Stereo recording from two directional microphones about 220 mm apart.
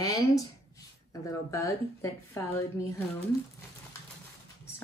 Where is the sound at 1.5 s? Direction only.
15° left (ahead or behind).